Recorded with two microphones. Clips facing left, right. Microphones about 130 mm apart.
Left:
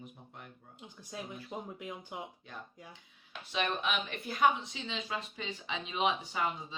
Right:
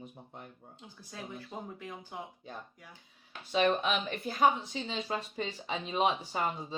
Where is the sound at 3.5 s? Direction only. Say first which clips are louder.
Right 6 dB; 35° right (ahead or behind).